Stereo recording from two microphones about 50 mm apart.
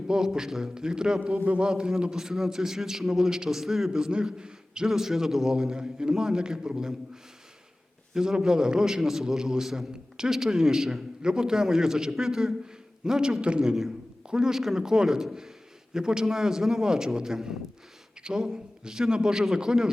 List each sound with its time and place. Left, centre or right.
0.1 s a man's voice: centre
8.1 s a man's voice: centre